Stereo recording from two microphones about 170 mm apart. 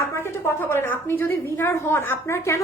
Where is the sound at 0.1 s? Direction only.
15° left (ahead or behind).